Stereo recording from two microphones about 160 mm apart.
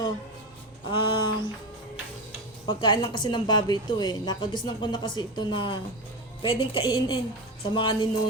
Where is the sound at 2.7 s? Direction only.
25° left (ahead or behind).